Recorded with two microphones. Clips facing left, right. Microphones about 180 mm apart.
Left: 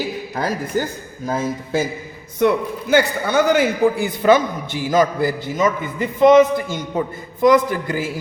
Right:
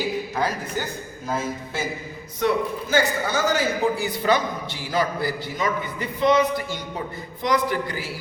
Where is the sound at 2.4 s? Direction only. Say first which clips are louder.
Left 5 dB; 60° left (ahead or behind).